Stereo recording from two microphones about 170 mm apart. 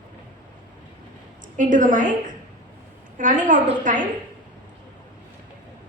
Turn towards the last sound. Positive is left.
turn(degrees=-50)  # may be behind; listen again after turning